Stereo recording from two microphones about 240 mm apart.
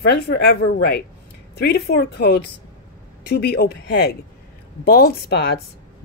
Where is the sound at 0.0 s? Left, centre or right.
Left.